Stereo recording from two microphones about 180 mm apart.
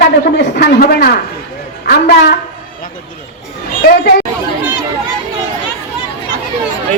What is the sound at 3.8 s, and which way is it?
Speech, 70° left (ahead or behind).